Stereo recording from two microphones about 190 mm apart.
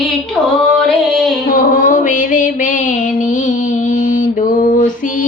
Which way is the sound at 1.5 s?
45° left (ahead or behind).